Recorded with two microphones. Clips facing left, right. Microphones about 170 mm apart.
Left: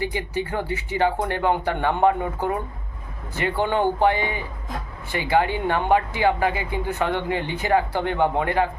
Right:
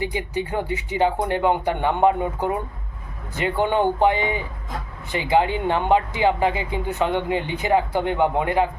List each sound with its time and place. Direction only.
0.0 s speech: 15° right (ahead or behind)